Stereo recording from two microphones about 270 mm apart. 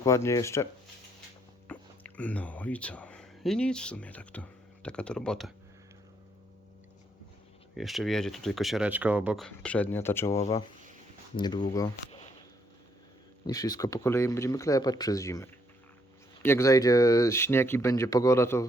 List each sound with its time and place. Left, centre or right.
0.0 s speech: centre
7.8 s speech: centre
13.5 s speech: centre